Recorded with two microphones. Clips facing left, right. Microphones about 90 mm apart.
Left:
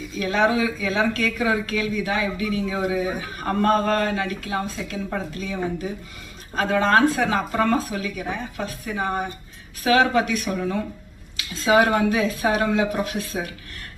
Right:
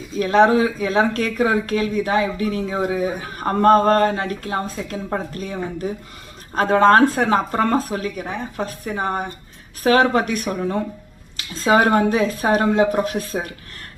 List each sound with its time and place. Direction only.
0.2 s speech: 40° right (ahead or behind)